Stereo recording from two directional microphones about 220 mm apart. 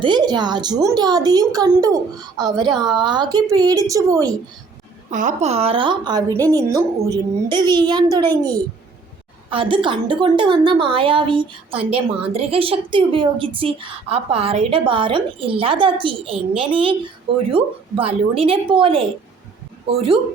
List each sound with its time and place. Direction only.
0.0 s a woman's voice: 20° right (ahead or behind)
5.1 s a woman's voice: 30° right (ahead or behind)
9.5 s a woman's voice: 25° right (ahead or behind)